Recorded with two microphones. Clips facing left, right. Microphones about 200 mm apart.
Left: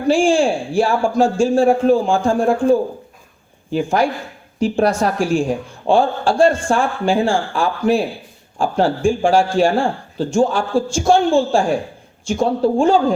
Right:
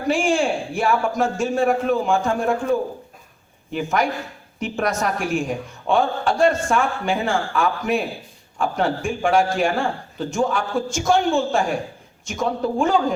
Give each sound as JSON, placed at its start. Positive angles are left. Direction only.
{"t": 0.1, "sound": "speech", "side_deg": 30}